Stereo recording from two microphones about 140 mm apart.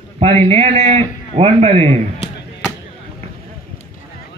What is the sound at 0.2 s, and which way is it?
A man's voice, 45° right (ahead or behind).